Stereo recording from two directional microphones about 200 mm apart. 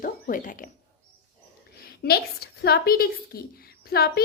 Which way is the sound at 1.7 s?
50° left (ahead or behind).